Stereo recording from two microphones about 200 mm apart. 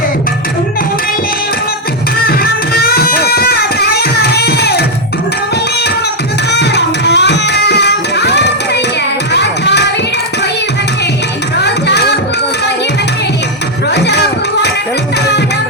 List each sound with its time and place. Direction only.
2.2 s music: 50° left (ahead or behind)
6.5 s music: 60° left (ahead or behind)
11.6 s music: 55° left (ahead or behind)
13.9 s a sound: 60° left (ahead or behind)